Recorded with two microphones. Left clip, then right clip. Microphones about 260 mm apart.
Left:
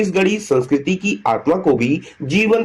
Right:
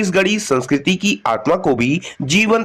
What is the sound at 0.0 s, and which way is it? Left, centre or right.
Speech, right.